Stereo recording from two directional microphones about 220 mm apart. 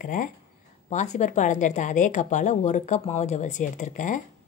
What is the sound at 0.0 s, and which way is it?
Speech, 40° left (ahead or behind).